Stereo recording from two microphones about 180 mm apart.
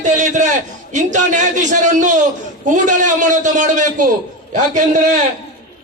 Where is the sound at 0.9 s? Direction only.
45° right (ahead or behind).